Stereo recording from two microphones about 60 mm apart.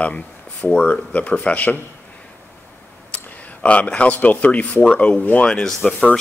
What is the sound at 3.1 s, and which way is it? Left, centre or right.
Speech, left.